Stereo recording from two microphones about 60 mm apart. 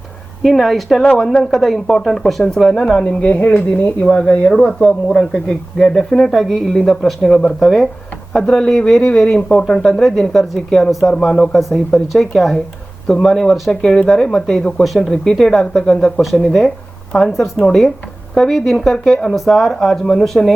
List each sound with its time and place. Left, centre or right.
0.4 s speech: centre
3.0 s speech: centre
3.5 s speech: left
4.0 s speech: centre
12.1 s speech: centre
14.8 s speech: centre
15.1 s speech: centre